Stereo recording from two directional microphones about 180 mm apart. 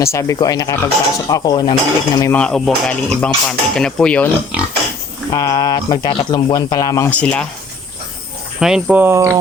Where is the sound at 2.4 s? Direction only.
5° left (ahead or behind).